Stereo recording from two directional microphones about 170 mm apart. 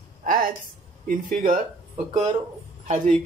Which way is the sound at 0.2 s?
55° right (ahead or behind).